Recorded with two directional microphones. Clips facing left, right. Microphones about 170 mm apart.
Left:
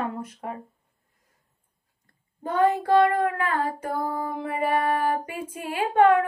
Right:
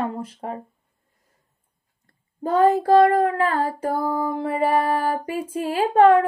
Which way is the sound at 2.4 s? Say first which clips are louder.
Right 5 dB; 35° right (ahead or behind).